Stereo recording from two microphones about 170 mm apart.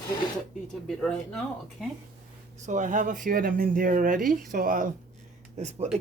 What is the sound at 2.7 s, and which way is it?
Speech, 45° right (ahead or behind).